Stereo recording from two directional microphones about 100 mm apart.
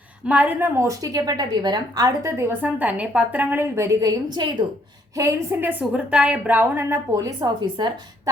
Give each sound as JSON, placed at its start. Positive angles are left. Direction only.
{"t": 0.3, "sound": "a woman's voice", "side_deg": -15}
{"t": 0.8, "sound": "a woman's voice", "side_deg": -35}
{"t": 3.8, "sound": "a woman's voice", "side_deg": -30}
{"t": 5.1, "sound": "a woman's voice", "side_deg": -35}
{"t": 5.5, "sound": "a woman's voice", "side_deg": -20}
{"t": 6.9, "sound": "speech", "side_deg": -35}